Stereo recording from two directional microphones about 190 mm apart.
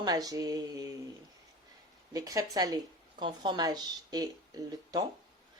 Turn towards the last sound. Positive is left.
turn(degrees=-20)  # may be behind; listen again after turning